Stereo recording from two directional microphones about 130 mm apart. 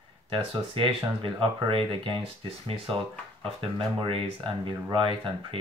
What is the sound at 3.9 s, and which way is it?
Speech, 45° right (ahead or behind).